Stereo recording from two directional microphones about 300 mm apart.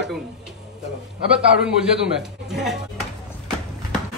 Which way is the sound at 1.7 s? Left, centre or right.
Centre.